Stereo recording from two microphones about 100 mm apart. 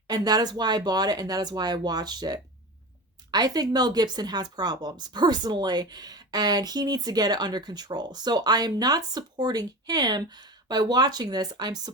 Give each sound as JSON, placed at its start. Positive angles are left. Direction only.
{"t": 0.1, "sound": "speech", "side_deg": -40}